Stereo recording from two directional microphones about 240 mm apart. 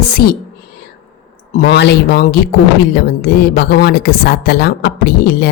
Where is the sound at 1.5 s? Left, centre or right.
Left.